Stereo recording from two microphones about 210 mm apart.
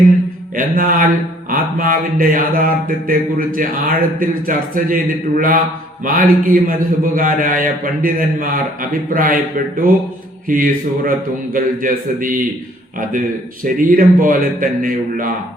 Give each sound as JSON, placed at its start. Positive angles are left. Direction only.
{"t": 0.5, "sound": "a man's voice", "side_deg": -40}
{"t": 6.1, "sound": "a man's voice", "side_deg": -45}
{"t": 13.7, "sound": "a man's voice", "side_deg": -40}